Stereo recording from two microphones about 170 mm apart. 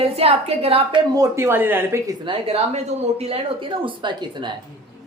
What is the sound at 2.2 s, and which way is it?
A woman's voice, 35° right (ahead or behind).